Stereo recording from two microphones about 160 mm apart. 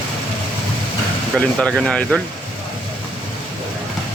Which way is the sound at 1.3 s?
5° left (ahead or behind).